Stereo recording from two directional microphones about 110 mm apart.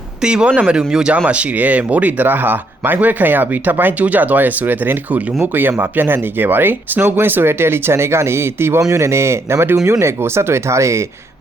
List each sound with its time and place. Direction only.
0.2 s speech: 10° right (ahead or behind); by 11.0 s 25° right (ahead or behind)